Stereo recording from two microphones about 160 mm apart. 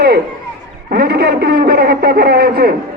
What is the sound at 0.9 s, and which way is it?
A man's voice, 80° right.